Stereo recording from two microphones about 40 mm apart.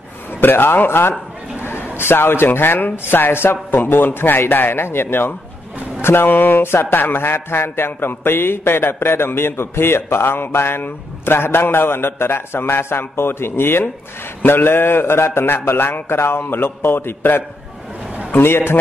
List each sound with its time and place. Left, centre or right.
0.4 s a man's voice: left
3.7 s speech: left
6.6 s a man's voice: left
18.3 s a man's voice: left